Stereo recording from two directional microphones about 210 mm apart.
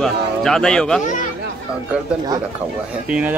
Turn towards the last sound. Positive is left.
turn(degrees=-5)  # may be behind; listen again after turning